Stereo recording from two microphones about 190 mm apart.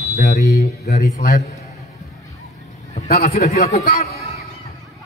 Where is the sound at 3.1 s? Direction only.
55° left (ahead or behind).